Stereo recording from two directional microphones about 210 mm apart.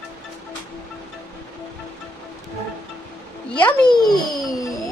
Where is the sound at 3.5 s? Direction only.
5° left (ahead or behind).